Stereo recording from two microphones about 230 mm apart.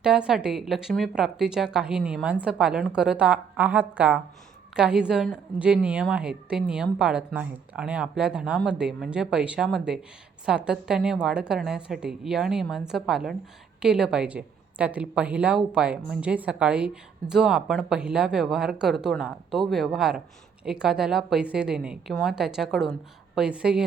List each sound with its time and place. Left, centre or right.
0.0 s a woman's voice: centre